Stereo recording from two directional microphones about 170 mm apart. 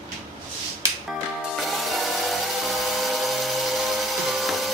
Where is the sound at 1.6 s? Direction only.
Centre (ahead or behind).